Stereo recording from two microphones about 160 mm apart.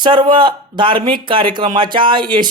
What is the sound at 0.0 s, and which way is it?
Speech, 30° right (ahead or behind).